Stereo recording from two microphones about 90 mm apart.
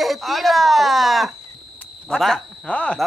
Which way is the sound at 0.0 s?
Centre (ahead or behind).